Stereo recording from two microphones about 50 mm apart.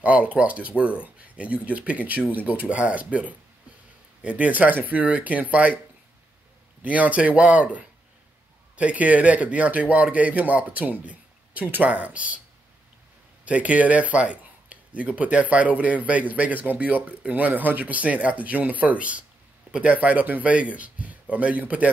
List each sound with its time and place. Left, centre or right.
0.0 s a man's voice: right
6.8 s a man's voice: right
13.5 s a man's voice: right